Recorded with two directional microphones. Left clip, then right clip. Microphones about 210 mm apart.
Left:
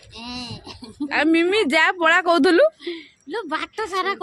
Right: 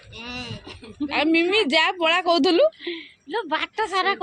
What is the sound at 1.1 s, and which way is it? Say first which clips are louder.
Speech: left 2 dB; 15° left (ahead or behind).